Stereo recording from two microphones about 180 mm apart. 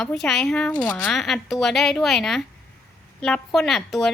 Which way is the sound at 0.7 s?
25° left (ahead or behind).